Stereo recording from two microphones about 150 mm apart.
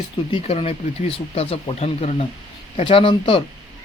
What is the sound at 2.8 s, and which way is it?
Speech, 35° left (ahead or behind).